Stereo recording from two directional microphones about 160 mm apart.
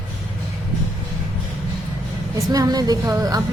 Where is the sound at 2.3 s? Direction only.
20° right (ahead or behind).